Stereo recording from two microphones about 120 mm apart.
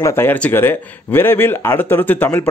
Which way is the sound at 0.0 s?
20° left (ahead or behind).